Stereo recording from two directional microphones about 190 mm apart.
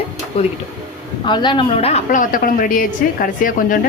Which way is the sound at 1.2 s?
25° left (ahead or behind).